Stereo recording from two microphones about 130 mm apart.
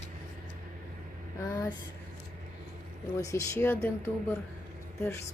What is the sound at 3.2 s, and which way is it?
Speech, 20° left (ahead or behind).